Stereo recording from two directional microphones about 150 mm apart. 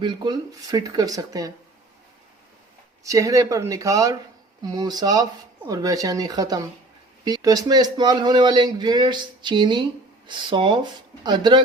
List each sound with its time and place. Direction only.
0.0 s speech: 30° right (ahead or behind)
3.0 s speech: 20° right (ahead or behind)